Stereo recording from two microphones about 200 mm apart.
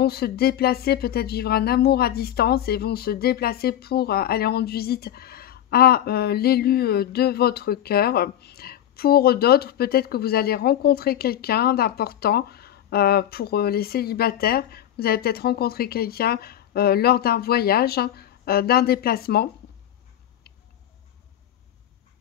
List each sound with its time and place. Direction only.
0.0 s speech: 50° left (ahead or behind)